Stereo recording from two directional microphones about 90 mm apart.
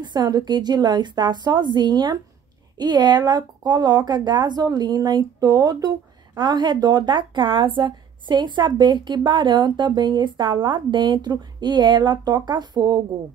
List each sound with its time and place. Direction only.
0.0 s a woman's voice: 50° right (ahead or behind)